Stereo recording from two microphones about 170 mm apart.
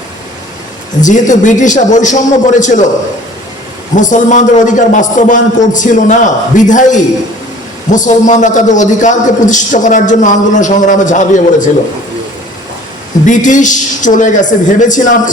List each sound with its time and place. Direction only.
1.0 s a man's voice: 45° left (ahead or behind)
3.9 s a man's voice: 45° left (ahead or behind)
13.2 s a man's voice: 45° left (ahead or behind)